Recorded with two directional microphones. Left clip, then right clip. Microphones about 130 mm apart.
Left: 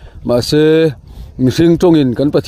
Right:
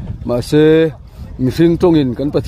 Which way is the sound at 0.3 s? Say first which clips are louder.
Left 1 dB; 15° left (ahead or behind).